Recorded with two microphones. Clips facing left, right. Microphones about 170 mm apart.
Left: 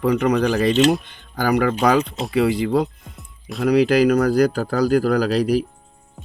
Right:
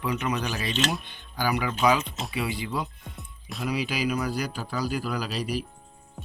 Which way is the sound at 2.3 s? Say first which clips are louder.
Left 13 dB; 90° left.